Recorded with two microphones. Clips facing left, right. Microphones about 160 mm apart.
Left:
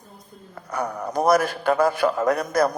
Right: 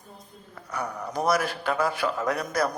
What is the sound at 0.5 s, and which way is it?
Speech, 45° left (ahead or behind).